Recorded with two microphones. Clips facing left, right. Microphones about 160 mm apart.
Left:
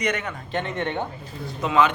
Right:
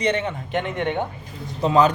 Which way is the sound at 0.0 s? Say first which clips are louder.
Right 4 dB; 30° right (ahead or behind).